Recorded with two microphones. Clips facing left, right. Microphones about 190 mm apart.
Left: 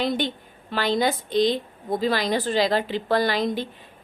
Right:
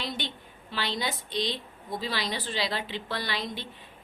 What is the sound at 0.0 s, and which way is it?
A woman's voice, 50° left (ahead or behind).